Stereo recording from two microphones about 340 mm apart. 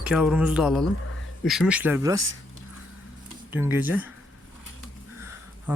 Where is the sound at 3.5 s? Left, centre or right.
Centre.